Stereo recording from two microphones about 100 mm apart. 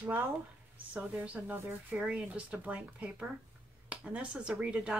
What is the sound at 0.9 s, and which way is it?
A woman's voice, 15° right (ahead or behind).